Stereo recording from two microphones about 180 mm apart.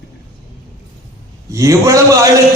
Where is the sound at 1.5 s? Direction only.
20° right (ahead or behind).